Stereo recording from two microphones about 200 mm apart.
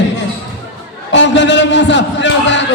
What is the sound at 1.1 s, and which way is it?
A man's voice, 60° left (ahead or behind).